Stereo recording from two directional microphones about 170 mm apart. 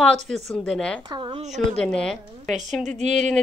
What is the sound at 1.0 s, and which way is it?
Speech, 25° right (ahead or behind).